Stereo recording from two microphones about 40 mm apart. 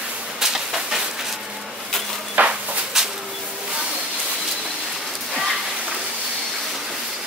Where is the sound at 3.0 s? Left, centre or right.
Centre.